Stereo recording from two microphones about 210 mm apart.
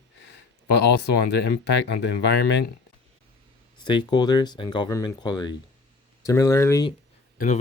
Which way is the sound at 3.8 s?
20° left (ahead or behind).